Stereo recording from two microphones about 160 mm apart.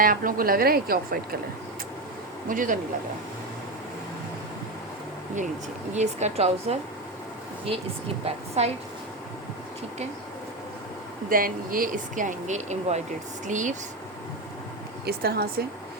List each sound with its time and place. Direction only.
0.0 s a woman's voice: 60° right (ahead or behind)
2.5 s a woman's voice: 55° right (ahead or behind)
5.9 s speech: 45° right (ahead or behind)
8.2 s a woman's voice: 40° right (ahead or behind)
11.3 s speech: 60° right (ahead or behind)
15.0 s speech: 75° right (ahead or behind)